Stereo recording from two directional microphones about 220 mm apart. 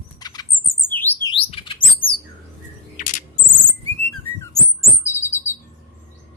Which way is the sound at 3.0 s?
35° left (ahead or behind).